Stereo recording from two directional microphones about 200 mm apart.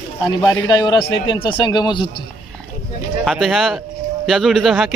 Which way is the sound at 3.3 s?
Centre (ahead or behind).